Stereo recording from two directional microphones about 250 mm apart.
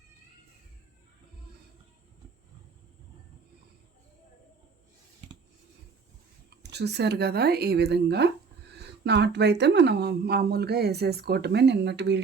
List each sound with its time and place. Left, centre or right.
6.6 s speech: right